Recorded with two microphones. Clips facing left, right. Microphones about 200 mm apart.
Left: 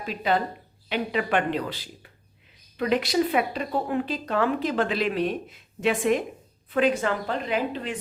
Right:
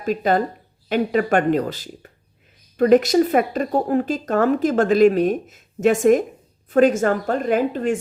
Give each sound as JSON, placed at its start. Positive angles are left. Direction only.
{"t": 0.0, "sound": "a woman's voice", "side_deg": -45}